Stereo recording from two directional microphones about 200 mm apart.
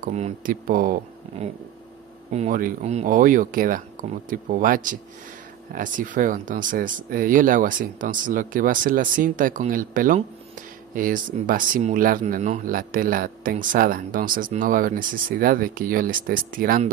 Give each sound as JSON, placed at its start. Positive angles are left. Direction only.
{"t": 0.0, "sound": "speech", "side_deg": -40}
{"t": 2.3, "sound": "speech", "side_deg": -40}